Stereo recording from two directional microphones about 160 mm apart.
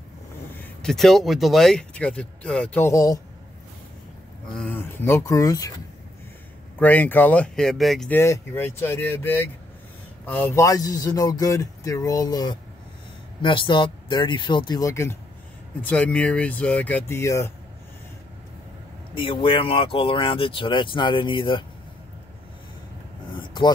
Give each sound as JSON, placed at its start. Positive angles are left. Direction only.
{"t": 0.6, "sound": "speech", "side_deg": 0}
{"t": 4.5, "sound": "speech", "side_deg": 5}
{"t": 6.8, "sound": "speech", "side_deg": 10}
{"t": 8.1, "sound": "speech", "side_deg": 15}
{"t": 15.9, "sound": "speech", "side_deg": 5}
{"t": 19.1, "sound": "speech", "side_deg": 35}
{"t": 23.3, "sound": "vehicle", "side_deg": 30}